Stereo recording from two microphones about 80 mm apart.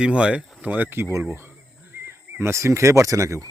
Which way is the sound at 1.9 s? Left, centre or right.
Right.